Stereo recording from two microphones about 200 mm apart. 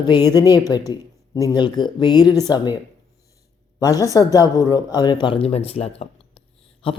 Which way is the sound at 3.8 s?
15° left (ahead or behind).